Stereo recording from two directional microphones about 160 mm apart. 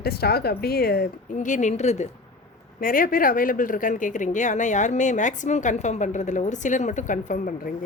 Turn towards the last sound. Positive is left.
turn(degrees=55)  # may be behind; listen again after turning